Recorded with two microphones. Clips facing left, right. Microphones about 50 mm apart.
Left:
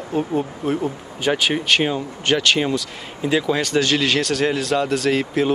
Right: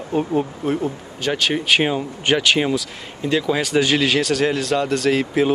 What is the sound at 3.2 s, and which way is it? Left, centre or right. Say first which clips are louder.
Speech: even; centre.